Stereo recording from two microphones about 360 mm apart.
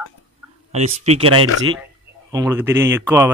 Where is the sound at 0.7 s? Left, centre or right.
Centre.